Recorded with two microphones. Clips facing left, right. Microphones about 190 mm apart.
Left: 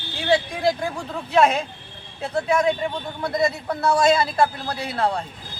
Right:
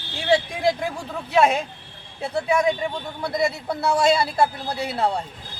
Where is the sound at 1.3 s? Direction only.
10° right (ahead or behind).